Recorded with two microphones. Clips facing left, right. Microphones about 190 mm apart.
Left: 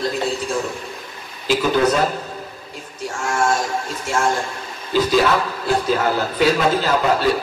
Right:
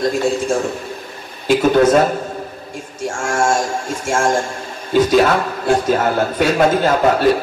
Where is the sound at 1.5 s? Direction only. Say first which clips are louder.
Right 5 dB; 50° right (ahead or behind).